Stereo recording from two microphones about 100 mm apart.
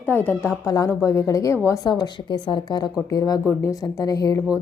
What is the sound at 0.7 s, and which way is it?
A woman's voice, 35° left (ahead or behind).